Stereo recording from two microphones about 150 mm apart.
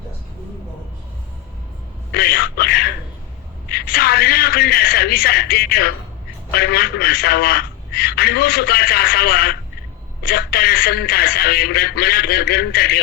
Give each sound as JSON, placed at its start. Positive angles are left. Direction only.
{"t": 2.1, "sound": "music", "side_deg": 90}
{"t": 3.7, "sound": "a sound", "side_deg": 90}
{"t": 6.5, "sound": "a man's voice", "side_deg": 90}